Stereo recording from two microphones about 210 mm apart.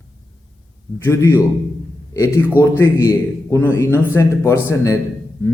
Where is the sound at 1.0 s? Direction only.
15° left (ahead or behind).